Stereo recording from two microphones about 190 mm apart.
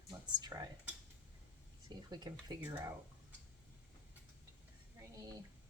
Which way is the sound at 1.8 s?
20° right (ahead or behind).